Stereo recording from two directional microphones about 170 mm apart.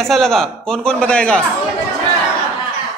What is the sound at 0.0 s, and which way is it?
A man's voice, centre (ahead or behind).